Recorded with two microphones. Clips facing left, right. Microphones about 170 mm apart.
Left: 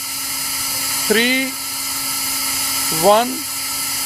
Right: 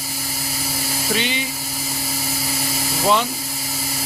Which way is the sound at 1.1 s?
45° left (ahead or behind).